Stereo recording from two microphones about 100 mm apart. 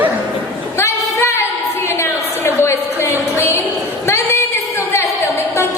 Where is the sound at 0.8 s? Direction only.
25° left (ahead or behind).